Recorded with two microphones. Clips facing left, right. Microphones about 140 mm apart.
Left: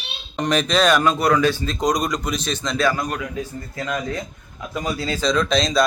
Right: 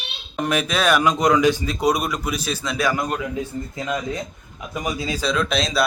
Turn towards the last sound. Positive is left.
turn(degrees=-5)  # may be behind; listen again after turning